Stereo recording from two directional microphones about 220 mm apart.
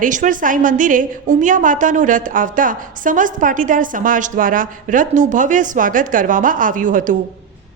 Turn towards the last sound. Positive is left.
turn(degrees=-35)  # may be behind; listen again after turning